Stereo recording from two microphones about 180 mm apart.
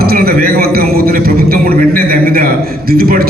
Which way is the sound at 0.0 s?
55° right (ahead or behind).